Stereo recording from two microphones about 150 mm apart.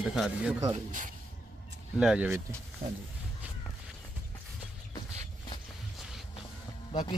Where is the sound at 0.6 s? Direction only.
55° right (ahead or behind).